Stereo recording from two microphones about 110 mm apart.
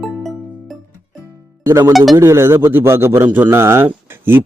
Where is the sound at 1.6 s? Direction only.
25° right (ahead or behind).